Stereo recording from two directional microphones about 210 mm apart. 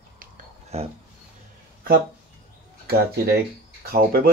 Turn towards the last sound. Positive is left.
turn(degrees=-45)  # may be behind; listen again after turning